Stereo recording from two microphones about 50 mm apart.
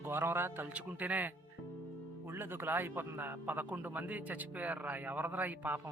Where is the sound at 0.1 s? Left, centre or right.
Right.